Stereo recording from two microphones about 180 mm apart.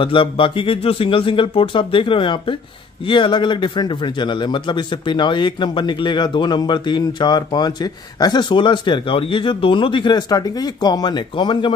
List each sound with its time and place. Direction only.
0.0 s a man's voice: 30° left (ahead or behind)